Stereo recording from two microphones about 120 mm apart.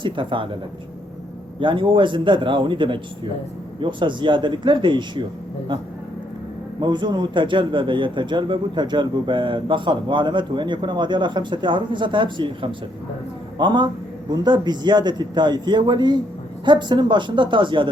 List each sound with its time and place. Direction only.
0.0 s a man's voice: 45° right (ahead or behind)
1.5 s a man's voice: 45° right (ahead or behind)
6.7 s a man's voice: 35° right (ahead or behind)